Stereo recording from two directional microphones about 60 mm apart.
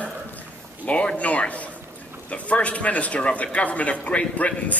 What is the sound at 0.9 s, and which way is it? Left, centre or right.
A man's voice, left.